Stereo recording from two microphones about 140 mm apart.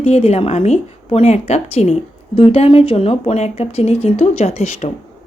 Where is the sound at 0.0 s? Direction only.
45° left (ahead or behind).